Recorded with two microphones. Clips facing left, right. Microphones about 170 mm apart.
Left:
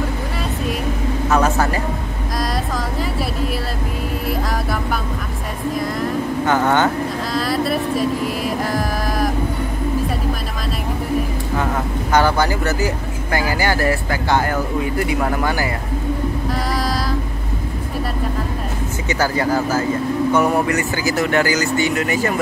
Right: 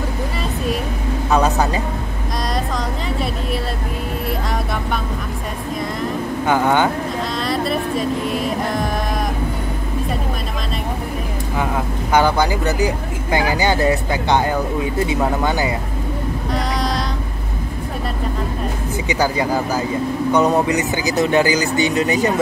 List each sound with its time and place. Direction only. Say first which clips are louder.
1.3 s speech: right 1 dB; 15° right (ahead or behind)
6.4 s speech: right 1 dB; 10° right (ahead or behind)
7.3 s music: left 3 dB; centre (ahead or behind)
11.5 s speech: even; 10° right (ahead or behind)
16.5 s female singing: even; 5° left (ahead or behind)
19.0 s speech: even; 15° right (ahead or behind)